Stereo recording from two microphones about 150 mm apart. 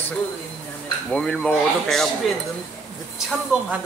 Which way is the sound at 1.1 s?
5° left (ahead or behind).